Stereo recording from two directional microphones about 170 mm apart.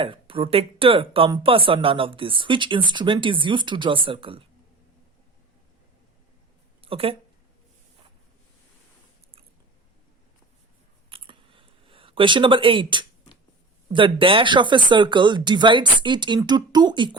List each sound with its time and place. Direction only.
0.0 s speech: 30° right (ahead or behind)
6.8 s speech: 35° right (ahead or behind)
11.1 s a sound: 30° right (ahead or behind)
13.9 s speech: 30° right (ahead or behind)